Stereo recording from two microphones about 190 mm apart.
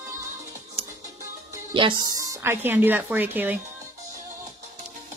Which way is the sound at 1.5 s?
25° right (ahead or behind).